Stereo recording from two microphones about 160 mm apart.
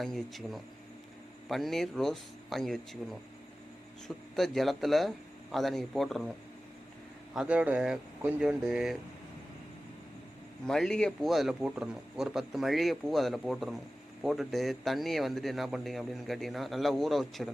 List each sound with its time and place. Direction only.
0.0 s speech: centre (ahead or behind)
4.4 s speech: centre (ahead or behind)
7.3 s speech: 10° right (ahead or behind)
10.7 s speech: 5° left (ahead or behind)